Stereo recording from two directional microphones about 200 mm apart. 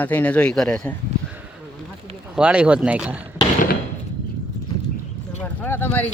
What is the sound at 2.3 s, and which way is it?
Speech, 5° right (ahead or behind).